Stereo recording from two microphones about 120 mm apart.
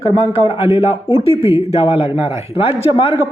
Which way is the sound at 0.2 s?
50° left (ahead or behind).